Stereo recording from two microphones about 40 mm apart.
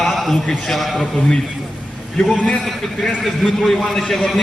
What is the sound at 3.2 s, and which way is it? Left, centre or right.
A man's voice, centre.